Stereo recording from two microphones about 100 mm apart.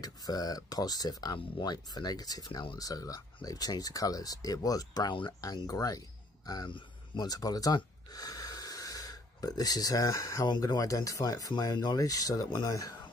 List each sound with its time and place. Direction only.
0.0 s speech: 40° left (ahead or behind)